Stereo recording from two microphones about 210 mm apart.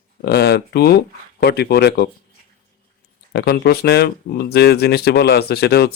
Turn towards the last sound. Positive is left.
turn(degrees=50)  # may be behind; listen again after turning